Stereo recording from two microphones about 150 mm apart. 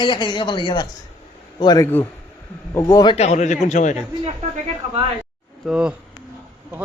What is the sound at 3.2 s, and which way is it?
Speech, 50° left (ahead or behind).